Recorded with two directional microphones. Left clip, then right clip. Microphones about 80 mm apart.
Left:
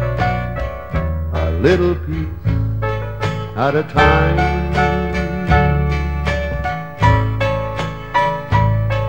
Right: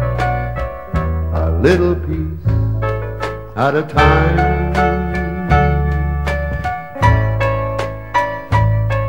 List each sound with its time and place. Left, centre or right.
0.0 s music: left
4.0 s music: left
4.4 s music: left